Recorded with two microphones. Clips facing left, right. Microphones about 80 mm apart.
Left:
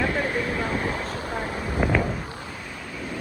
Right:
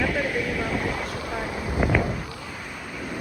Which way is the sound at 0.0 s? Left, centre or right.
Left.